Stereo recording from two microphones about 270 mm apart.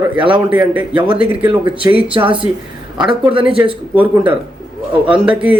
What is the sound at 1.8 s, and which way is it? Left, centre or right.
Speech, centre.